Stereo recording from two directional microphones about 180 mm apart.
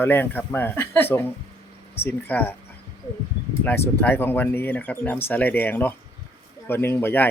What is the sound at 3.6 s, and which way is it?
Speech, 10° left (ahead or behind).